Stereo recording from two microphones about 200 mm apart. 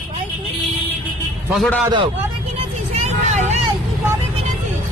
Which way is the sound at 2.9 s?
35° right (ahead or behind).